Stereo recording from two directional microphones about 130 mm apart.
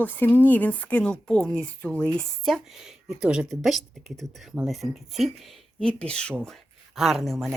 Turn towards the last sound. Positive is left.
turn(degrees=0)  # may be behind; listen again after turning